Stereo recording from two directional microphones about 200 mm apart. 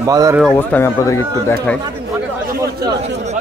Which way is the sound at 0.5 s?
10° left (ahead or behind).